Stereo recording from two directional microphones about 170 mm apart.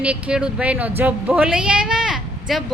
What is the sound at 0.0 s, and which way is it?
A woman's voice, 5° right (ahead or behind).